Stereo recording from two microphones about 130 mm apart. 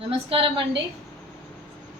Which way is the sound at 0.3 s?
45° right (ahead or behind).